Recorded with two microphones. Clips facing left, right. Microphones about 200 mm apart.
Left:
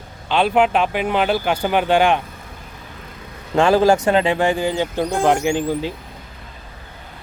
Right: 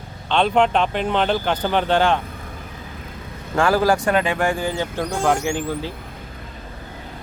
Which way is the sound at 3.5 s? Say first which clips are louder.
Left 4 dB; 20° left (ahead or behind).